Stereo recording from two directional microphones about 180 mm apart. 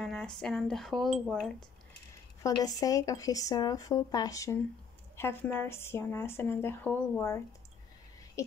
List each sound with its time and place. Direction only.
0.0 s speech: 5° left (ahead or behind)
2.4 s speech: 20° left (ahead or behind)